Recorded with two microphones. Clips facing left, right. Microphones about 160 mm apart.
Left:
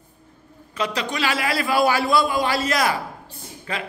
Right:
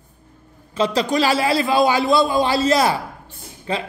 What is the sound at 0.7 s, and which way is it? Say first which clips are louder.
A man's voice: right 7 dB; 30° right (ahead or behind).